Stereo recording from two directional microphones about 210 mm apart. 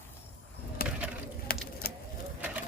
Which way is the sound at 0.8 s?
45° left (ahead or behind).